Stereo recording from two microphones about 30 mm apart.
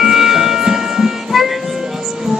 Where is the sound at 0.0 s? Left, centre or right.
Centre.